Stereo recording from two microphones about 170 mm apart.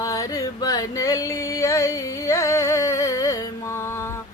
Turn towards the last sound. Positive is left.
turn(degrees=15)  # may be behind; listen again after turning